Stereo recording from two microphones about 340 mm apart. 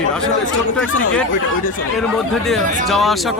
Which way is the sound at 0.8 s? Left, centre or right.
Left.